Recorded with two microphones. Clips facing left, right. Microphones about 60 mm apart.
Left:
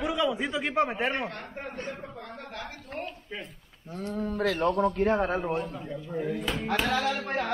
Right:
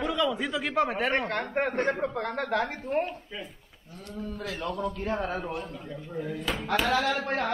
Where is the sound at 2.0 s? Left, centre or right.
Right.